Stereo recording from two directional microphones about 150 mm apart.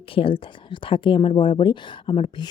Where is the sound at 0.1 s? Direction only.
35° left (ahead or behind).